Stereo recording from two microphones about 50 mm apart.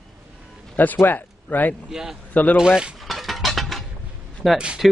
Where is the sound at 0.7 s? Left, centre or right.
Left.